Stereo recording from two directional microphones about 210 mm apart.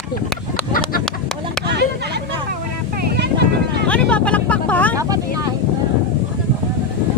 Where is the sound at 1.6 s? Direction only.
50° right (ahead or behind).